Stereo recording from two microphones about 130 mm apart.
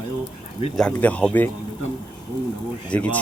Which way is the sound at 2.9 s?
10° left (ahead or behind).